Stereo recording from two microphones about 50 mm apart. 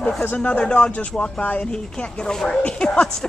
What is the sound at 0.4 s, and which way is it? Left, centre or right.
Speech, left.